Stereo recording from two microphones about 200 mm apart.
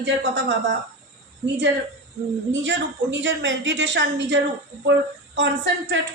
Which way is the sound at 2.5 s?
65° right (ahead or behind).